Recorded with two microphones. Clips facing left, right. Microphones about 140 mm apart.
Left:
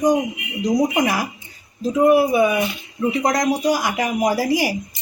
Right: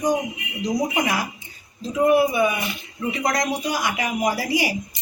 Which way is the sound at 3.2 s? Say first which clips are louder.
Left 4 dB; 35° left (ahead or behind).